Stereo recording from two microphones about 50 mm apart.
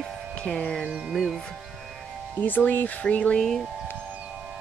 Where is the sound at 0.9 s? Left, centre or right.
Centre.